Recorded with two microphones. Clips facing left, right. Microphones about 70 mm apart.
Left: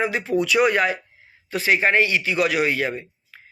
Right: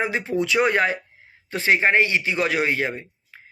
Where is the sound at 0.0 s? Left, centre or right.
Right.